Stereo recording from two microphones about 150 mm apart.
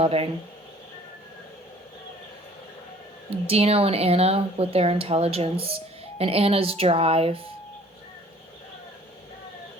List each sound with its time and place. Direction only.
0.0 s speech: 40° right (ahead or behind)
3.2 s speech: 40° right (ahead or behind)